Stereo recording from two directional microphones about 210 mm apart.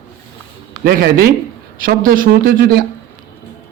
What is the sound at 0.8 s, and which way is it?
A man's voice, 50° right (ahead or behind).